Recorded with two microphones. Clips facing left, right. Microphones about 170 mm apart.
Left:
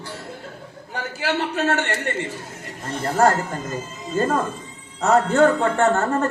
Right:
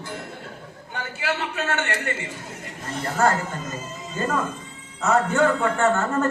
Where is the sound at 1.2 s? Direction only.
35° left (ahead or behind).